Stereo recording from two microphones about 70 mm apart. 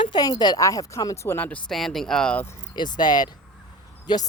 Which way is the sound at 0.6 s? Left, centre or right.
Left.